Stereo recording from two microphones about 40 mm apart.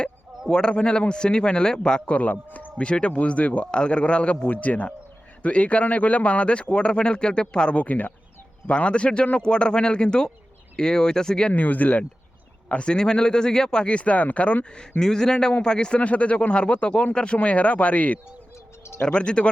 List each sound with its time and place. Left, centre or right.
0.4 s speech: centre
2.0 s a man's voice: left
2.7 s speech: left
4.4 s speech: left
7.8 s speech: left
8.6 s speech: left
11.5 s speech: left
12.6 s speech: left
13.9 s speech: left
14.8 s speech: centre
16.0 s speech: left
19.0 s speech: left